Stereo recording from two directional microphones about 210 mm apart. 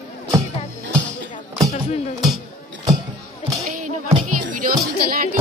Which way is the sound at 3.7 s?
40° right (ahead or behind).